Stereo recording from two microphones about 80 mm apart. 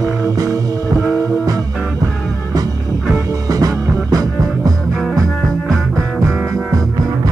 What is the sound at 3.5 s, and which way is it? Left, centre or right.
Music, right.